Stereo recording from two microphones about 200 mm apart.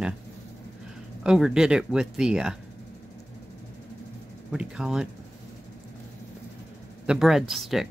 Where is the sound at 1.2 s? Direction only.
5° right (ahead or behind).